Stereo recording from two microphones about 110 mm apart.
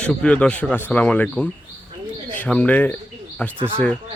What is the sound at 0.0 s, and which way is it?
Speech, 10° left (ahead or behind).